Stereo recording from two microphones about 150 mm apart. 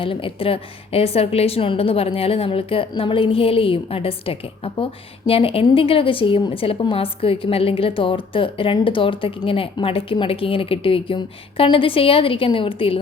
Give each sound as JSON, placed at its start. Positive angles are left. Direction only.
{"t": 0.0, "sound": "a woman's voice", "side_deg": 35}